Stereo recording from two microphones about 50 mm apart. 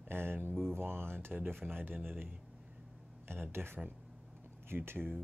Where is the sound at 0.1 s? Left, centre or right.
Right.